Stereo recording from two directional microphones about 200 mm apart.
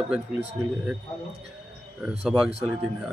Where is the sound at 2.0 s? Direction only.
5° right (ahead or behind).